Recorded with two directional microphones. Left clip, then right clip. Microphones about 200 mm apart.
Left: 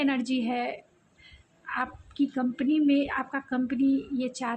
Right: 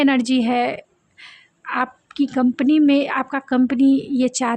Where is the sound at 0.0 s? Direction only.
45° right (ahead or behind).